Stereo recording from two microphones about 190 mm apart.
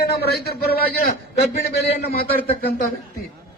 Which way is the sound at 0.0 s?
55° left (ahead or behind).